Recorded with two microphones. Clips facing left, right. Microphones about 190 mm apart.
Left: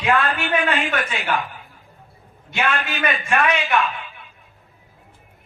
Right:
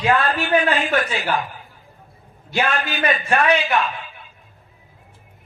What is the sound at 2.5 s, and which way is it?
A man's voice, 35° right (ahead or behind).